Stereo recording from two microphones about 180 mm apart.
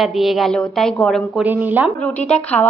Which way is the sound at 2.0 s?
5° left (ahead or behind).